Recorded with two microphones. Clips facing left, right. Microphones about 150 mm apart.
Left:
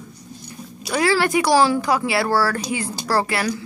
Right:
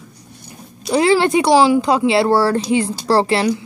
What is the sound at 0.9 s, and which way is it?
A woman's voice, 20° right (ahead or behind).